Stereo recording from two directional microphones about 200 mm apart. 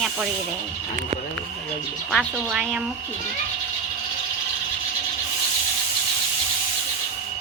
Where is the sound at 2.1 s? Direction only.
Centre (ahead or behind).